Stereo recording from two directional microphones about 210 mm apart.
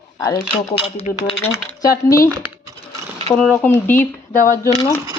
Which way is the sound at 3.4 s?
5° left (ahead or behind).